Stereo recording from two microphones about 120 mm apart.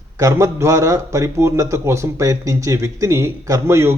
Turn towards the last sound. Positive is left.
turn(degrees=-20)  # may be behind; listen again after turning